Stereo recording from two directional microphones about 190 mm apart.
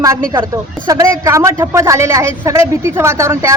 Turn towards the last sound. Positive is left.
turn(degrees=-15)  # may be behind; listen again after turning